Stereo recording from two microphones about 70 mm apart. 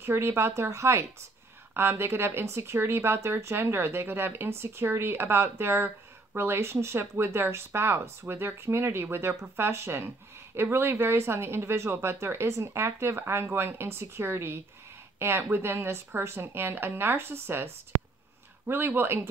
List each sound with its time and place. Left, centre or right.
0.0 s speech: right
1.7 s speech: right
18.7 s speech: right